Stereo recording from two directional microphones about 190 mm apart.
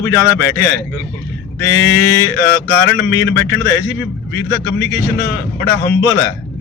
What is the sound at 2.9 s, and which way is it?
A man's voice, 85° left.